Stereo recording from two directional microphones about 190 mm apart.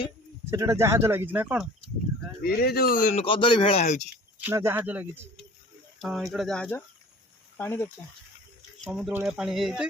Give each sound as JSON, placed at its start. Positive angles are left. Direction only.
{"t": 0.5, "sound": "speech", "side_deg": -15}
{"t": 2.4, "sound": "a man's voice", "side_deg": 55}
{"t": 3.2, "sound": "speech", "side_deg": 25}
{"t": 4.4, "sound": "speech", "side_deg": -10}
{"t": 8.9, "sound": "speech", "side_deg": -5}